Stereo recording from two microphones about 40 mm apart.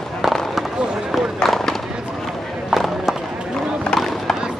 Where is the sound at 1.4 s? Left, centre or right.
Centre.